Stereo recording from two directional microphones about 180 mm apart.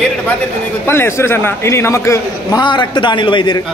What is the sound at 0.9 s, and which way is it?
A man's voice, 15° left (ahead or behind).